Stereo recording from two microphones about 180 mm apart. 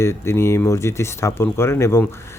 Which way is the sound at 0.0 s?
15° left (ahead or behind).